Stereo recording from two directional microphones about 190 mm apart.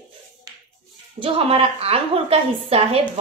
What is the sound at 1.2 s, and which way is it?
A woman's voice, 30° right (ahead or behind).